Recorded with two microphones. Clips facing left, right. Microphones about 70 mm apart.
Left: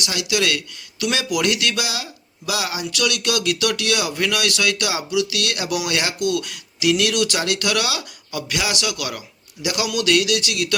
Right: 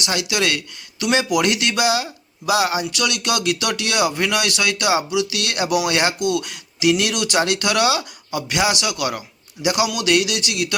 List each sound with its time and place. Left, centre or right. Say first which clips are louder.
0.0 s speech: right 1 dB; right